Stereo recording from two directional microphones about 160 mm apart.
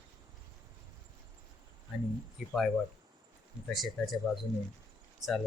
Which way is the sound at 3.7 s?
Centre (ahead or behind).